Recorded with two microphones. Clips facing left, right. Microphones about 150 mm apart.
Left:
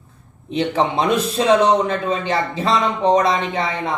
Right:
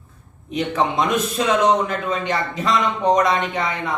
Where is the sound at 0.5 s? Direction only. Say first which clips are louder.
Left 2 dB; 30° left (ahead or behind).